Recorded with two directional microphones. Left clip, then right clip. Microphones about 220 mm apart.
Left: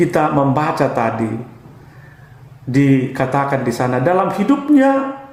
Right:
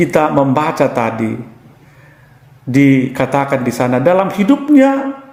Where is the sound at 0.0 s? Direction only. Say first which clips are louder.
Right 3 dB; 40° right (ahead or behind).